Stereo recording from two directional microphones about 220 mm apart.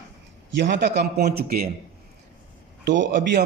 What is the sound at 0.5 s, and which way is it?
A man's voice, 50° right (ahead or behind).